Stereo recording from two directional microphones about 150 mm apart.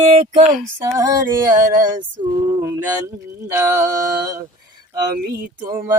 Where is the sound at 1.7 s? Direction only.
60° right (ahead or behind).